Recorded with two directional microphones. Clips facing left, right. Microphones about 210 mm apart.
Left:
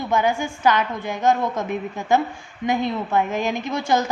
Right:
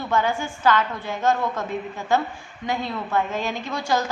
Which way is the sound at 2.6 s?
20° left (ahead or behind).